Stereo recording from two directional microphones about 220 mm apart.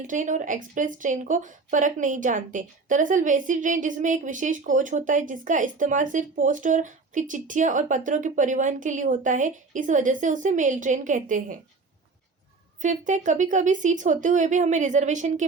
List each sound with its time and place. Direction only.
0.1 s speech: 35° right (ahead or behind)
12.8 s speech: 35° right (ahead or behind)